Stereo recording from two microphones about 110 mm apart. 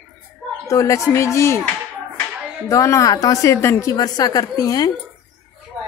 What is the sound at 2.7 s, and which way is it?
Speech, 30° left (ahead or behind).